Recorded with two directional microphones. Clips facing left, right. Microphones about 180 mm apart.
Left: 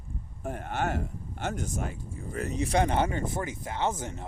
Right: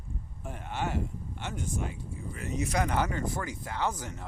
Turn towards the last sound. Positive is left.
turn(degrees=25)  # may be behind; listen again after turning